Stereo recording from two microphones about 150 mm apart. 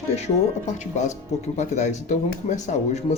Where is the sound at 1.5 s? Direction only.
50° left (ahead or behind).